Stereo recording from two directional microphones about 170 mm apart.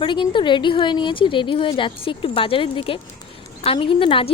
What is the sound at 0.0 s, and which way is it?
A woman's voice, 30° left (ahead or behind).